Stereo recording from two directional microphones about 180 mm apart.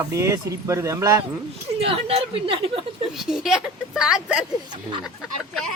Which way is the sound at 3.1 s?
Centre (ahead or behind).